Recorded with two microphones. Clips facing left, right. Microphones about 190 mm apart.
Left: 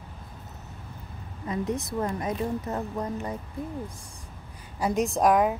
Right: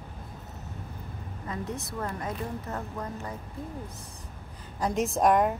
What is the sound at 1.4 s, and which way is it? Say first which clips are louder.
A woman's voice: left 6 dB; 15° left (ahead or behind).